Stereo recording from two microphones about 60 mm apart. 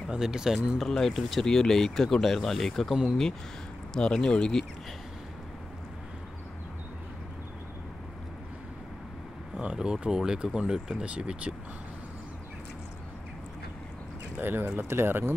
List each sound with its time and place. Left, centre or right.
0.1 s speech: centre
0.7 s speech: centre
9.6 s speech: centre
14.4 s speech: right